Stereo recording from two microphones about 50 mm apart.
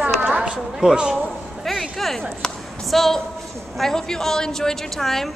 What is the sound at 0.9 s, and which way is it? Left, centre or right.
Speech, centre.